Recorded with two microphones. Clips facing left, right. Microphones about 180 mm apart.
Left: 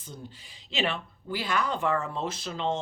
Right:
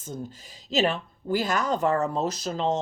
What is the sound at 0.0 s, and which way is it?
Speech, 45° right (ahead or behind).